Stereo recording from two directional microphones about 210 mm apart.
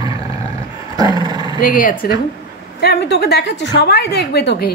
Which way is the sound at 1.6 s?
40° left (ahead or behind).